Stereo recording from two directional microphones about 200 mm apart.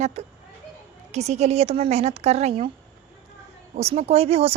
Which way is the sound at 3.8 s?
30° right (ahead or behind).